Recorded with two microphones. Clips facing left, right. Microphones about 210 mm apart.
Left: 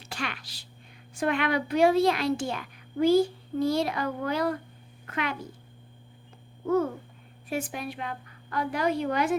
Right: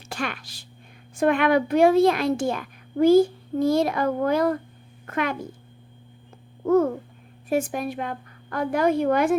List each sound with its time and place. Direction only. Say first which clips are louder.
0.1 s a woman's voice: right 5 dB; 50° right (ahead or behind)
7.5 s a woman's voice: right 8 dB; 45° right (ahead or behind)